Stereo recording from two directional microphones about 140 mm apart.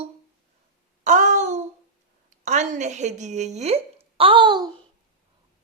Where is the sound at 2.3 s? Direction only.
55° right (ahead or behind); by 4.7 s 30° right (ahead or behind).